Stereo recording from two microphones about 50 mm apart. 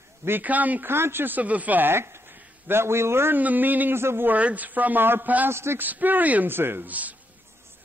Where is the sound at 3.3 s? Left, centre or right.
Right.